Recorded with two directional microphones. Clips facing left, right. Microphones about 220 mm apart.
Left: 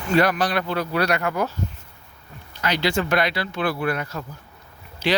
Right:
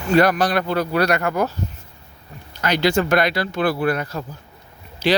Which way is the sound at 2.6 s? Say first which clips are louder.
Right 4 dB; 45° right (ahead or behind).